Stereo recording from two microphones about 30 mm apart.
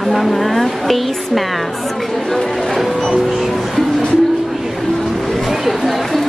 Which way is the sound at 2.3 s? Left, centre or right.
Centre.